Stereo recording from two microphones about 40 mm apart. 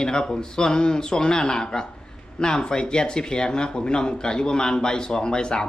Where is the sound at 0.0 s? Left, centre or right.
Centre.